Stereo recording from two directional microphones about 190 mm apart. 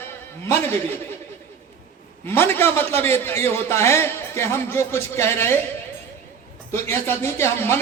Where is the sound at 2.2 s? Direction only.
10° left (ahead or behind).